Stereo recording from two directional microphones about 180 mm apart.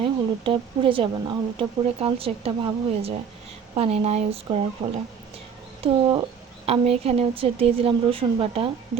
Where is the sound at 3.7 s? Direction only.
35° right (ahead or behind).